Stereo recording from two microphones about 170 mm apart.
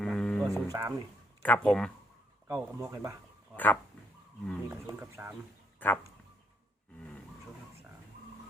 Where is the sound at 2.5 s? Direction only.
15° right (ahead or behind).